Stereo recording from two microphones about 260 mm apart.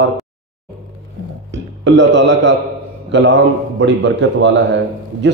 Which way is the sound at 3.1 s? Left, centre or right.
Right.